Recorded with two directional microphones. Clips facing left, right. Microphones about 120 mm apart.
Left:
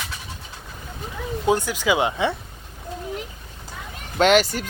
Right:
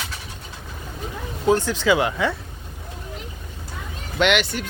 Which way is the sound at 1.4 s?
15° left (ahead or behind).